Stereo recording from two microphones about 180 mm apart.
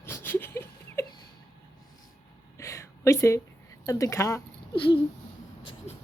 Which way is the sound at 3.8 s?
20° left (ahead or behind).